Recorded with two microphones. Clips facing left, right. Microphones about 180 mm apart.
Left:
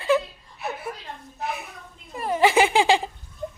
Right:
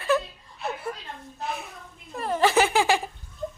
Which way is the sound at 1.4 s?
65° left (ahead or behind).